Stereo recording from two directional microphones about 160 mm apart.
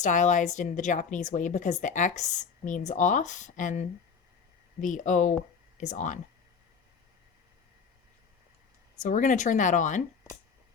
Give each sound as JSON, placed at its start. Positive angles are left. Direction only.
{"t": 0.0, "sound": "speech", "side_deg": 50}
{"t": 9.0, "sound": "speech", "side_deg": 50}